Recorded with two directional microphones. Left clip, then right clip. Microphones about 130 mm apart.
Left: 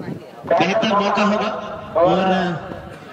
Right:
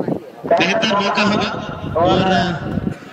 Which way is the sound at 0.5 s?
15° right (ahead or behind).